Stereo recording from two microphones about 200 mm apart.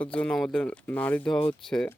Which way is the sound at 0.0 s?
5° left (ahead or behind).